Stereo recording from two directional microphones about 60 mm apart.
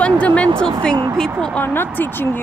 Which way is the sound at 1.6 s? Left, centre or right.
Left.